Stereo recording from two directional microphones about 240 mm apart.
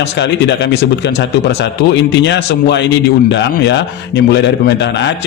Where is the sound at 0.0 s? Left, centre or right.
Left.